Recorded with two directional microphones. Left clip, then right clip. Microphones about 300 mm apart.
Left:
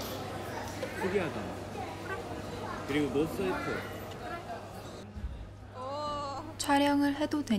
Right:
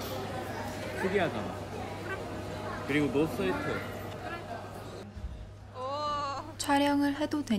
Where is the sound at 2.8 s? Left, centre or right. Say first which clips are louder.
Right 2 dB; centre.